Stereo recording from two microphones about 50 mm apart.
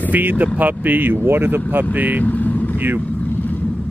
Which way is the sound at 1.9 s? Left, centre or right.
Right.